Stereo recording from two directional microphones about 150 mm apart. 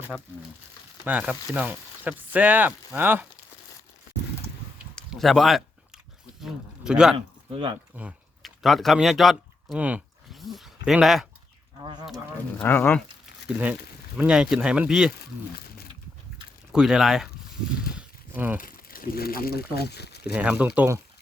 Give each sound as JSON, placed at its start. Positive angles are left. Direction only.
{"t": 0.1, "sound": "speech", "side_deg": 10}
{"t": 1.1, "sound": "speech", "side_deg": -10}
{"t": 4.9, "sound": "a sound", "side_deg": 0}
{"t": 6.4, "sound": "speech", "side_deg": -5}
{"t": 7.5, "sound": "speech", "side_deg": -35}
{"t": 7.9, "sound": "speech", "side_deg": -5}
{"t": 11.8, "sound": "speech", "side_deg": -30}
{"t": 12.5, "sound": "speech", "side_deg": 10}
{"t": 13.5, "sound": "speech", "side_deg": -10}
{"t": 16.7, "sound": "speech", "side_deg": -5}
{"t": 17.9, "sound": "a sound", "side_deg": -10}
{"t": 18.6, "sound": "speech", "side_deg": 75}
{"t": 20.3, "sound": "speech", "side_deg": -10}